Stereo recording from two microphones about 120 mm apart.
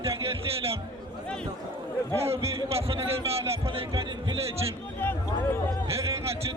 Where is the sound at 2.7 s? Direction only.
55° right (ahead or behind).